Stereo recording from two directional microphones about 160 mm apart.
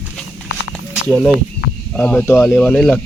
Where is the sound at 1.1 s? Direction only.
Centre (ahead or behind).